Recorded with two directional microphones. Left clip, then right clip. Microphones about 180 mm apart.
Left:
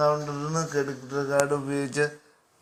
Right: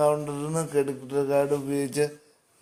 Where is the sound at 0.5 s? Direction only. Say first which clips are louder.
Even; 30° right (ahead or behind).